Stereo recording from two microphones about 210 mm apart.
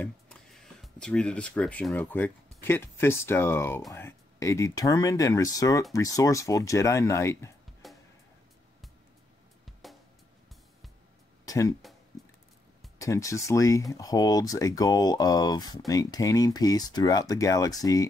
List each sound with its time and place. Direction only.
0.0 s speech: 5° left (ahead or behind)
7.8 s music: centre (ahead or behind)
9.8 s music: centre (ahead or behind)
11.4 s a sound: 15° left (ahead or behind)
13.0 s speech: 15° left (ahead or behind)